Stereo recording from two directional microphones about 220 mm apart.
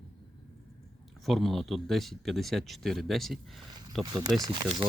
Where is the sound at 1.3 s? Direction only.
Centre (ahead or behind).